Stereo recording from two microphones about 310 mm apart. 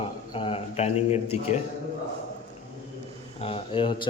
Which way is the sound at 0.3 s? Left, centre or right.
Centre.